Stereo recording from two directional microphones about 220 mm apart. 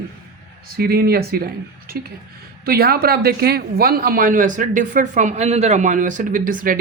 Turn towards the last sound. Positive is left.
turn(degrees=-40)  # may be behind; listen again after turning